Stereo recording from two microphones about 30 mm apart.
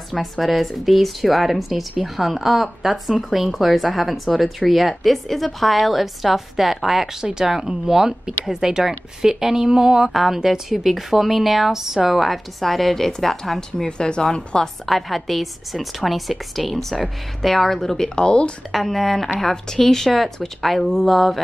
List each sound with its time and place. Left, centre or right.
0.1 s a woman's voice: centre
13.8 s a woman's voice: left
14.9 s a woman's voice: centre
18.1 s speech: left
18.7 s a woman's voice: centre